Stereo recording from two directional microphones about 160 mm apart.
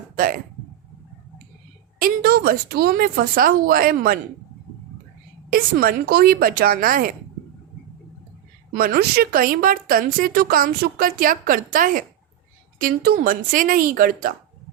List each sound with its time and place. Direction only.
2.0 s a woman's voice: 65° right (ahead or behind)
5.5 s a woman's voice: 65° right (ahead or behind)
8.7 s a woman's voice: 65° right (ahead or behind)